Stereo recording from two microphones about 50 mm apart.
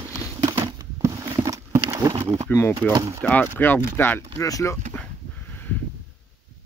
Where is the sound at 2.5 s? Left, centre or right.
Left.